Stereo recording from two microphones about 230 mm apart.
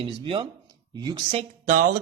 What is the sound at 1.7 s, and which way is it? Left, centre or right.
Speech, right.